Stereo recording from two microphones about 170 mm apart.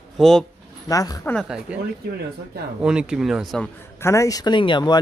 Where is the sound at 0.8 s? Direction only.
20° left (ahead or behind).